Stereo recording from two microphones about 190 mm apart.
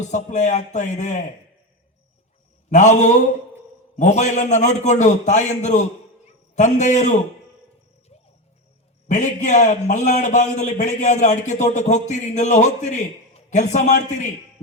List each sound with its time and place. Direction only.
0.0 s a man's voice: 40° left (ahead or behind)
2.6 s a man's voice: 40° left (ahead or behind)
8.1 s music: 30° left (ahead or behind)
9.0 s a man's voice: 40° left (ahead or behind)